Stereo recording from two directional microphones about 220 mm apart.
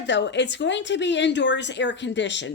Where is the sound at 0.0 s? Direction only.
55° left (ahead or behind).